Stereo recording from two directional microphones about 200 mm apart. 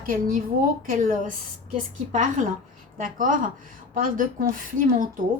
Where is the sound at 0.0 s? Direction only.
45° right (ahead or behind).